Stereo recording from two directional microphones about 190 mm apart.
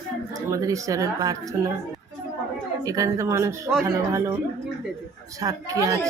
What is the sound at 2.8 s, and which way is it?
Speech, 20° right (ahead or behind).